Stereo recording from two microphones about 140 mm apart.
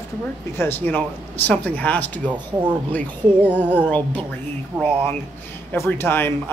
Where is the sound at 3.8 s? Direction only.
10° left (ahead or behind).